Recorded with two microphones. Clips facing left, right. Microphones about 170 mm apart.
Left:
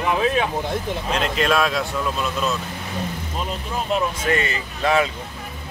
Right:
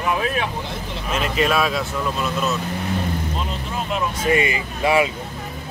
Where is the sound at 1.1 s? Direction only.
5° right (ahead or behind).